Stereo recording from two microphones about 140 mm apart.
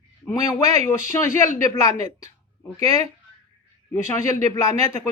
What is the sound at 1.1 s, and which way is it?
Speech, 20° left (ahead or behind).